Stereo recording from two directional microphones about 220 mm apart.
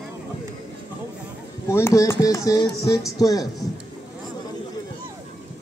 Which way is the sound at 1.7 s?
15° left (ahead or behind).